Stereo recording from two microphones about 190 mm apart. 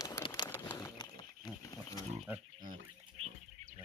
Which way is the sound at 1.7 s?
15° left (ahead or behind).